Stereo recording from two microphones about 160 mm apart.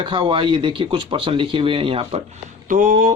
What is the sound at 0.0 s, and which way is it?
Speech, 30° right (ahead or behind).